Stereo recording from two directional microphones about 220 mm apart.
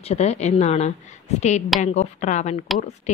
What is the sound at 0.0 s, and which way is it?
A woman's voice, 30° left (ahead or behind).